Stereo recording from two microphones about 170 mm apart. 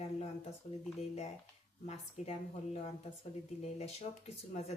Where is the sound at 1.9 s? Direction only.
35° left (ahead or behind).